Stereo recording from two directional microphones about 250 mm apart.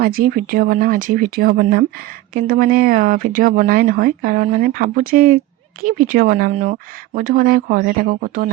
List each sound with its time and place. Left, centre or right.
0.0 s speech: right